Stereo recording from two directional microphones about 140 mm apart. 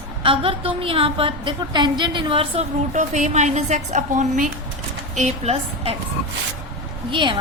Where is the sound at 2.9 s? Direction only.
60° right (ahead or behind).